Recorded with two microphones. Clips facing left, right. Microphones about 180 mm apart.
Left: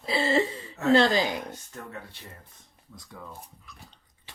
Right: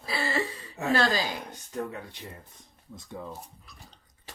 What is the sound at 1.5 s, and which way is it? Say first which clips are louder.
Speech: right 6 dB; 15° right (ahead or behind).